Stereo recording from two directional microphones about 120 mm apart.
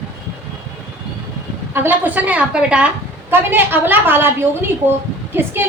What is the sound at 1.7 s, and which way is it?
A woman's voice, 15° right (ahead or behind).